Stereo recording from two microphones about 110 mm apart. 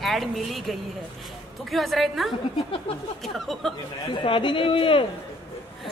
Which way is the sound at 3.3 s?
Centre (ahead or behind).